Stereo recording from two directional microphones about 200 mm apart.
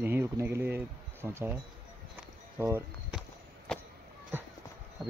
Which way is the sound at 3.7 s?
5° left (ahead or behind).